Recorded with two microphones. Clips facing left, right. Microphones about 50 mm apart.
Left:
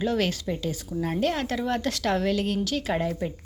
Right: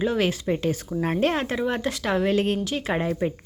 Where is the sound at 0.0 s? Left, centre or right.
Centre.